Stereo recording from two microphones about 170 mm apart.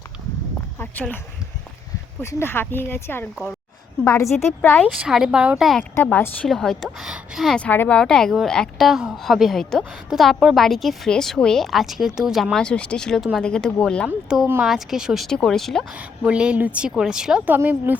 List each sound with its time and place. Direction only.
0.8 s speech: 10° left (ahead or behind)
2.2 s a woman's voice: 15° left (ahead or behind)
4.9 s a woman's voice: 5° right (ahead or behind)
6.0 s a woman's voice: 10° left (ahead or behind); by 17.9 s 10° right (ahead or behind)